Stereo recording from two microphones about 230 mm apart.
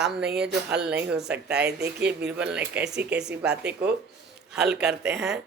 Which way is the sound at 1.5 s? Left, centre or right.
Right.